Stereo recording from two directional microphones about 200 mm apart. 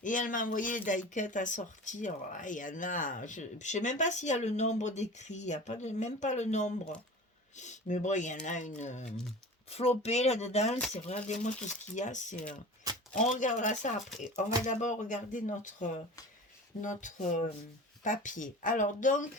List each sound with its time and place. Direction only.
0.0 s speech: 40° left (ahead or behind)
12.9 s a sound: 20° right (ahead or behind)
13.2 s speech: 40° left (ahead or behind)